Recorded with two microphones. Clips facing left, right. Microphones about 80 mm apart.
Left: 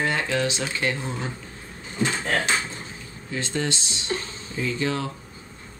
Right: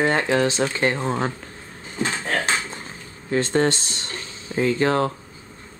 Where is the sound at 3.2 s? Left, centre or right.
Right.